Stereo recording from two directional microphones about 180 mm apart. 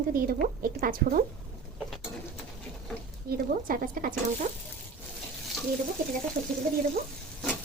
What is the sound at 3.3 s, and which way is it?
Speech, 50° right (ahead or behind).